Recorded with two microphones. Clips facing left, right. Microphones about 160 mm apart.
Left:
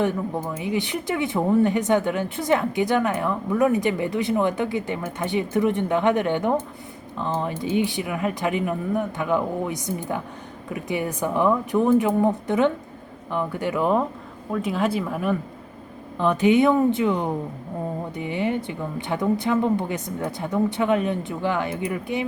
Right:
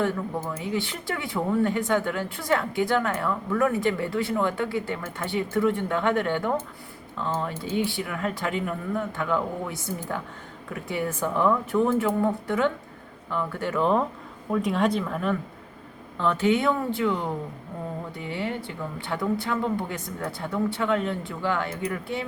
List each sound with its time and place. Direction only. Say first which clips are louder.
0.0 s speech: left 3 dB; 15° left (ahead or behind)